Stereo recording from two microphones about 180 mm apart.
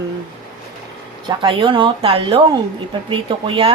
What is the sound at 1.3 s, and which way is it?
A woman's voice, 25° right (ahead or behind).